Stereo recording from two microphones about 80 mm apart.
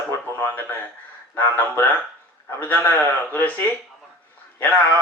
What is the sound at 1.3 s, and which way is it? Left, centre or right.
Speech, left.